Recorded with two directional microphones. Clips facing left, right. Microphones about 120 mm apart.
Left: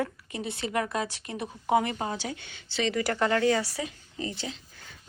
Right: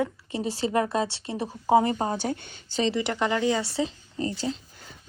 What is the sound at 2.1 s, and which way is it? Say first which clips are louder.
Speech: right 6 dB; 50° right (ahead or behind).